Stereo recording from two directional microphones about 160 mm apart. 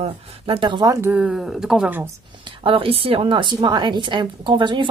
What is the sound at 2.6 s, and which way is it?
Speech, 35° right (ahead or behind).